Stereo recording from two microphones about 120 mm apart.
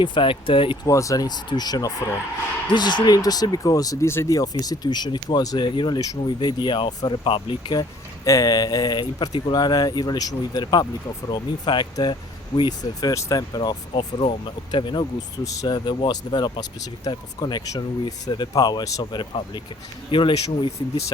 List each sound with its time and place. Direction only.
0.0 s speech: 45° left (ahead or behind)
0.9 s speech: 25° left (ahead or behind); by 20.4 s 45° left (ahead or behind)